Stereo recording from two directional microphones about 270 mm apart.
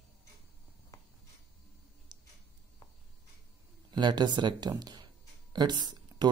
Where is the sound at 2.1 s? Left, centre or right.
Centre.